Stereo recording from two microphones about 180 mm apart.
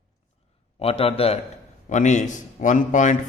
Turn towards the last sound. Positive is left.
turn(degrees=45)  # may be behind; listen again after turning